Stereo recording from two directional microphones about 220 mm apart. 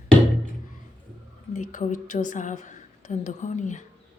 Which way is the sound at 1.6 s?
35° left (ahead or behind).